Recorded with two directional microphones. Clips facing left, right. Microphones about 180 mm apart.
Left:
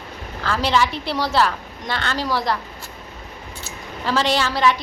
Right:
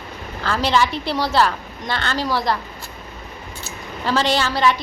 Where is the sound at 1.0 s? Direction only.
5° left (ahead or behind).